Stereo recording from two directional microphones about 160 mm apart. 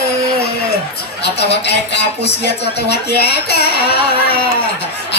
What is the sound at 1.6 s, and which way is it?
Speech, 90° left.